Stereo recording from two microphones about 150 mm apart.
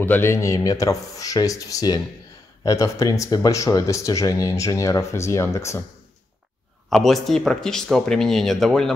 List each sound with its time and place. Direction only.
0.0 s speech: 15° left (ahead or behind)
6.9 s speech: centre (ahead or behind)